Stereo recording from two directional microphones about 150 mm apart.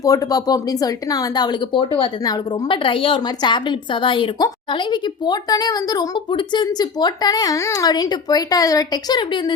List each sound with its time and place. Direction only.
0.0 s a woman's voice: 25° left (ahead or behind)